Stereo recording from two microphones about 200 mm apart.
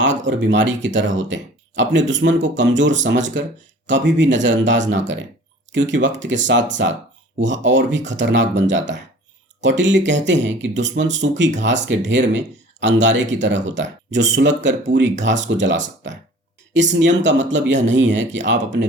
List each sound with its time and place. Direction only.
0.3 s speech: 65° right (ahead or behind)